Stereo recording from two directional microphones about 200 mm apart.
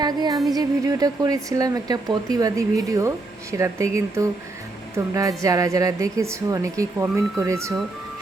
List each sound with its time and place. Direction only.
0.0 s music: 20° right (ahead or behind)
0.5 s a woman's voice: 20° right (ahead or behind)